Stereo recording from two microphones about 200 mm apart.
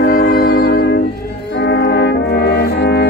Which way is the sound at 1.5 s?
60° left (ahead or behind).